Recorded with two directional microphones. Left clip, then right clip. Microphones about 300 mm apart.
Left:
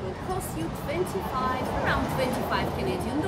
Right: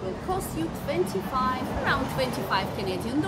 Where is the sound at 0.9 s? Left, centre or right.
Centre.